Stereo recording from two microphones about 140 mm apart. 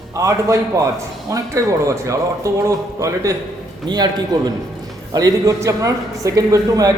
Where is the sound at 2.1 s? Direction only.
20° right (ahead or behind).